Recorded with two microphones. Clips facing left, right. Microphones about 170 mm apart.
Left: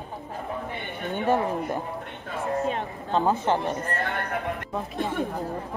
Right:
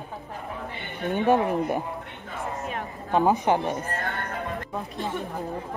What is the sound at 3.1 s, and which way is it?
Speech, 15° right (ahead or behind).